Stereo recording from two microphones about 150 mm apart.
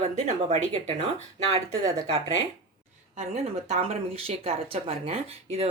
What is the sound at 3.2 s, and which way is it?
Speech, 45° right (ahead or behind).